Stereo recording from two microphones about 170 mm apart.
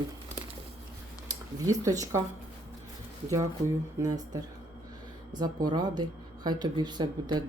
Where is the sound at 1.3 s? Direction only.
20° right (ahead or behind).